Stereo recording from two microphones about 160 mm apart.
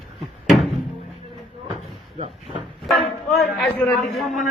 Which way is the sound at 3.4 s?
5° left (ahead or behind).